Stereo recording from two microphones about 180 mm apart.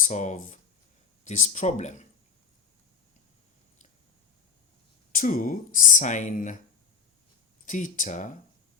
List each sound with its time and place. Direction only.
0.0 s speech: 40° left (ahead or behind)
5.1 s speech: 50° left (ahead or behind)
7.6 s speech: 45° left (ahead or behind)